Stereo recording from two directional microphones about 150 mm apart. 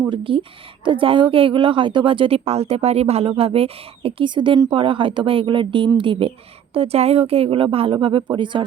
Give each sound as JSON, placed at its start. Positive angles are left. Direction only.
{"t": 0.1, "sound": "a woman's voice", "side_deg": -35}